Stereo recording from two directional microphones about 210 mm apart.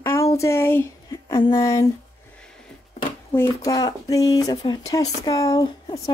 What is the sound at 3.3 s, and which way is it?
Speech, 15° left (ahead or behind).